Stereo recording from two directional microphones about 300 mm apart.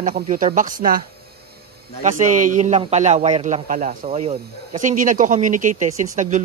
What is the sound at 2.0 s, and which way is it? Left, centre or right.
A man's voice, right.